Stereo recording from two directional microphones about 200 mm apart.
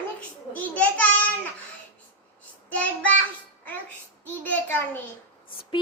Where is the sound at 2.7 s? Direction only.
5° left (ahead or behind).